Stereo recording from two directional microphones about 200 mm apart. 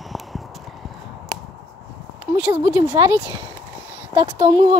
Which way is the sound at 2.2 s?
10° right (ahead or behind).